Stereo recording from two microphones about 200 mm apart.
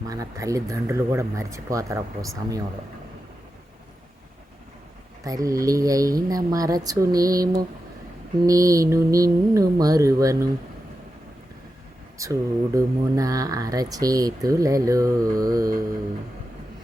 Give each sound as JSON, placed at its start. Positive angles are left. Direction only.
{"t": 0.0, "sound": "speech", "side_deg": -15}
{"t": 5.2, "sound": "speech", "side_deg": -15}
{"t": 12.1, "sound": "speech", "side_deg": -15}